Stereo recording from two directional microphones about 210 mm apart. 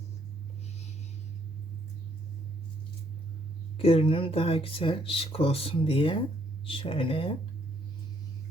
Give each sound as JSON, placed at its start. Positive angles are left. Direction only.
{"t": 3.8, "sound": "speech", "side_deg": 25}